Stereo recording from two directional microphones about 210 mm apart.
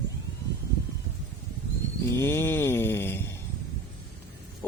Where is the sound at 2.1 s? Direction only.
10° left (ahead or behind).